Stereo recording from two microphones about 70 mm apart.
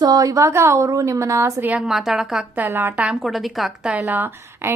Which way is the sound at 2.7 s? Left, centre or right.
Right.